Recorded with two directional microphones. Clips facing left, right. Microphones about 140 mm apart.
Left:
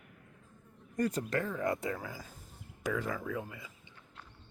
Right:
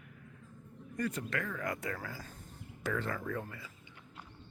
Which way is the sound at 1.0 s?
35° left (ahead or behind).